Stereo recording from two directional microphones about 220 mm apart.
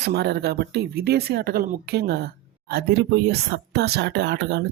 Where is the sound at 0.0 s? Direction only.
50° right (ahead or behind).